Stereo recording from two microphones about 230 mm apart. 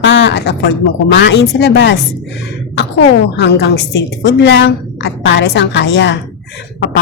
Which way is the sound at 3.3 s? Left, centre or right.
Left.